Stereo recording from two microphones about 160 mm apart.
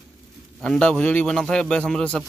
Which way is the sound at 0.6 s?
5° left (ahead or behind).